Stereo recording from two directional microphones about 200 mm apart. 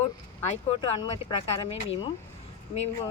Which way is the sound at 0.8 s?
20° left (ahead or behind).